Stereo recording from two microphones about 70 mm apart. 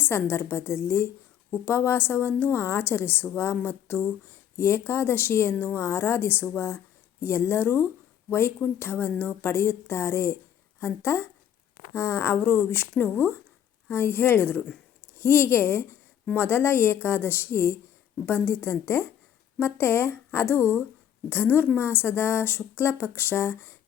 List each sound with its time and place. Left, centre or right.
0.0 s a woman's voice: left
1.5 s a woman's voice: left
1.7 s a woman's voice: left